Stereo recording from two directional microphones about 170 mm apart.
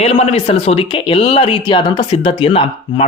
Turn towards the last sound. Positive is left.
turn(degrees=35)  # may be behind; listen again after turning